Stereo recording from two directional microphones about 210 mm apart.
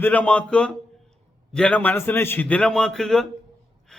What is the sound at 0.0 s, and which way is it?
A man's voice, 5° left (ahead or behind).